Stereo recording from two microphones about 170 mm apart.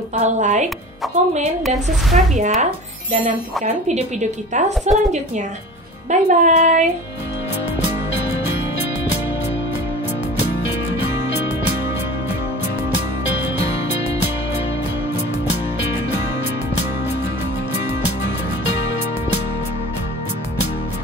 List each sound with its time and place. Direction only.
0.1 s a woman's voice: 45° right (ahead or behind)
1.0 s a woman's voice: centre (ahead or behind)
2.3 s a woman's voice: 45° right (ahead or behind)